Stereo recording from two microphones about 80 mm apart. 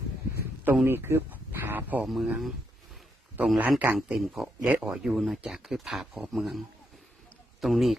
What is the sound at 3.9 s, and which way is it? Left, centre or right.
Speech, centre.